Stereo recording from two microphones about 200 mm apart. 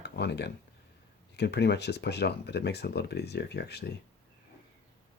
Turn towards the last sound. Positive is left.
turn(degrees=55)  # may be behind; listen again after turning